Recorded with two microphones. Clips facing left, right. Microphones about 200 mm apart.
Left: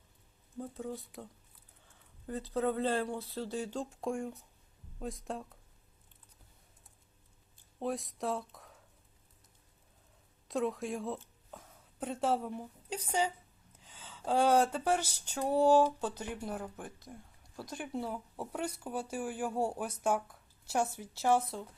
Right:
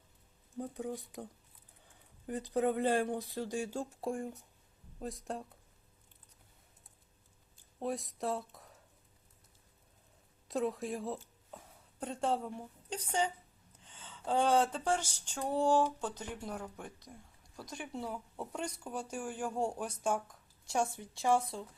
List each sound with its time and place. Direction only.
0.7 s speech: 15° right (ahead or behind); by 5.4 s centre (ahead or behind)
7.8 s speech: centre (ahead or behind)
10.5 s a woman's voice: centre (ahead or behind)